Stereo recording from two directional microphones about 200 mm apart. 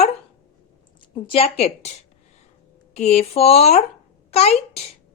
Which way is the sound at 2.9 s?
30° left (ahead or behind).